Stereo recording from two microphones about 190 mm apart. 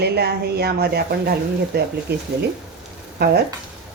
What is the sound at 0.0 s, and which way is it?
Speech, 60° right (ahead or behind).